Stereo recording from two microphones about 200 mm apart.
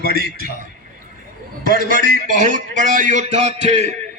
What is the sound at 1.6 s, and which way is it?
Music, 45° right (ahead or behind).